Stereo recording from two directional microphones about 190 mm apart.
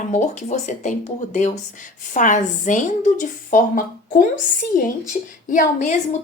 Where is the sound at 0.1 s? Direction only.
40° left (ahead or behind).